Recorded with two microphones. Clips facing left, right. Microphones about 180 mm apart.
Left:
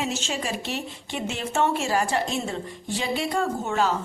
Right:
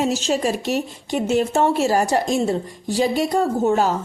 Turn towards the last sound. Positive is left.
turn(degrees=-40)  # may be behind; listen again after turning